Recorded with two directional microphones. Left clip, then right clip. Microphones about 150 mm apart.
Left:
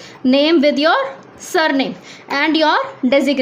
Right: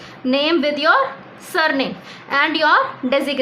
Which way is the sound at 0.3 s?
45° left (ahead or behind).